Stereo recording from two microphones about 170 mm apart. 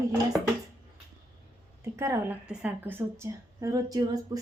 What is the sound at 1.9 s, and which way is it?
A woman's voice, 15° right (ahead or behind).